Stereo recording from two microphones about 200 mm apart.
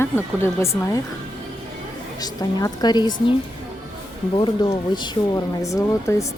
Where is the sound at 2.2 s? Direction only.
20° left (ahead or behind).